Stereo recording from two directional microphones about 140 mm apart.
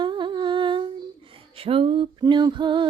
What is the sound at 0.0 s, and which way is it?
Humming, 35° right (ahead or behind).